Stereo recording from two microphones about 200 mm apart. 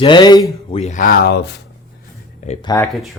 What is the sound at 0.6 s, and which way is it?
Speech, 30° left (ahead or behind).